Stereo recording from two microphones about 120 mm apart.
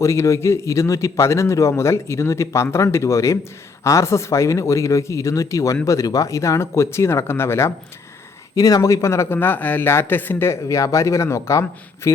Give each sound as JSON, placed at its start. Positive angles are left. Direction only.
{"t": 0.0, "sound": "speech", "side_deg": 25}